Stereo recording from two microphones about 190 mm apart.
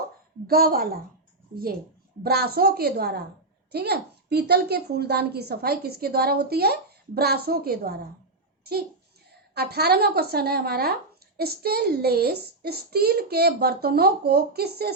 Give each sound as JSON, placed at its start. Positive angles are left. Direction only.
{"t": 0.4, "sound": "a woman's voice", "side_deg": -50}
{"t": 2.2, "sound": "a woman's voice", "side_deg": -55}
{"t": 9.3, "sound": "a woman's voice", "side_deg": -55}